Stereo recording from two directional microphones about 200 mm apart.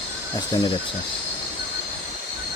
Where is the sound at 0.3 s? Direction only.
20° left (ahead or behind).